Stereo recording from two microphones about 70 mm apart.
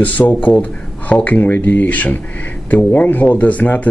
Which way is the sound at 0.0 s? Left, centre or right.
Left.